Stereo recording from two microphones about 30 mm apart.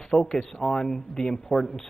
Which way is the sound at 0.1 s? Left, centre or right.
Centre.